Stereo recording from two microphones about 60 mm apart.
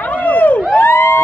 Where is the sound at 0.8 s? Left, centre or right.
Left.